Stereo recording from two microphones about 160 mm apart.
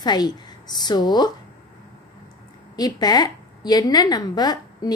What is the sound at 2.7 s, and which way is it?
A woman's voice, 25° left (ahead or behind).